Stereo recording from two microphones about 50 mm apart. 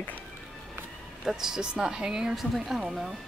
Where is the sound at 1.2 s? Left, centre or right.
Centre.